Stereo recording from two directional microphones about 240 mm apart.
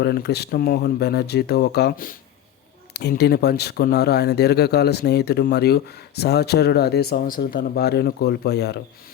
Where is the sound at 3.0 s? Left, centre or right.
Left.